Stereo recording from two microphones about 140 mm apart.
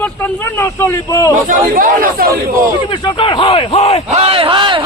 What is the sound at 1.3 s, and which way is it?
Speech, 75° right (ahead or behind).